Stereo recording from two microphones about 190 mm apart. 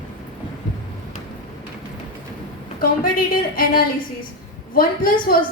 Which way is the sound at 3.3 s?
50° left (ahead or behind).